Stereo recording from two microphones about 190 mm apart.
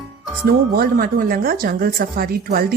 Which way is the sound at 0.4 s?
50° right (ahead or behind).